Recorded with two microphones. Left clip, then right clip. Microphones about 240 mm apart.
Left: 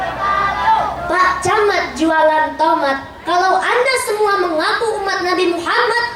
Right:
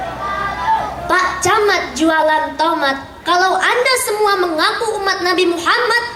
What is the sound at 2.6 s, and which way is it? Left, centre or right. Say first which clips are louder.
Speech: left 2 dB; centre.